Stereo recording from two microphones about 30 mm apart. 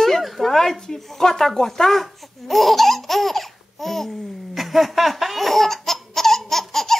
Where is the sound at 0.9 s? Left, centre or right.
Centre.